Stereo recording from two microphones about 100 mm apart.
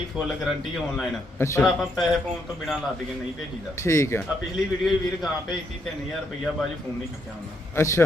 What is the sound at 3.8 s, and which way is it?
Speech, 30° left (ahead or behind).